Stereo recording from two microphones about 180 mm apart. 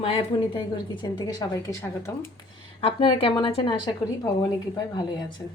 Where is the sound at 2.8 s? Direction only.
30° left (ahead or behind).